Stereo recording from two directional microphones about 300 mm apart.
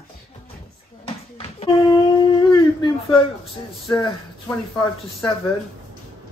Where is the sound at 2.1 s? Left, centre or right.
Centre.